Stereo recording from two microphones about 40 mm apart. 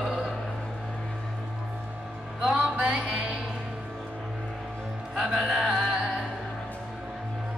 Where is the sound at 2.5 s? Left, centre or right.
Right.